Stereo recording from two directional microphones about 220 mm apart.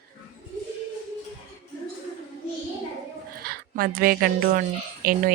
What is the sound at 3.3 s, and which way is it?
A woman's voice, 40° right (ahead or behind).